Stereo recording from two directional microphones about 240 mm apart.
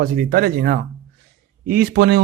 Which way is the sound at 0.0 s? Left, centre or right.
Right.